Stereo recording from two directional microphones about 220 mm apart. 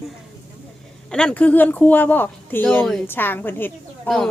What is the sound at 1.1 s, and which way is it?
Speech, 5° left (ahead or behind).